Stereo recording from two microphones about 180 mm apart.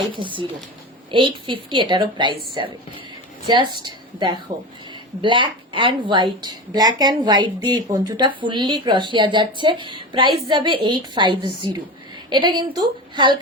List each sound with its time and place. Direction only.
0.2 s a woman's voice: 25° right (ahead or behind)
3.5 s a woman's voice: 25° right (ahead or behind)